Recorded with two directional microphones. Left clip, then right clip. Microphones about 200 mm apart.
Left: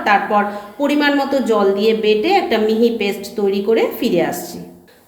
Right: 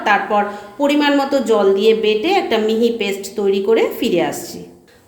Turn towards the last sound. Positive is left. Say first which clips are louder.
# even
turn(degrees=-15)  # may be behind; listen again after turning